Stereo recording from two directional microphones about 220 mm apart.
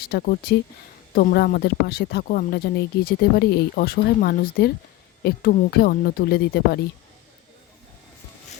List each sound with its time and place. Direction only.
0.0 s speech: 45° left (ahead or behind)